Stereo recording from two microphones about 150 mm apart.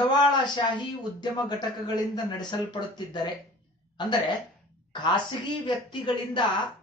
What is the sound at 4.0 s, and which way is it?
A man's voice, 30° left (ahead or behind).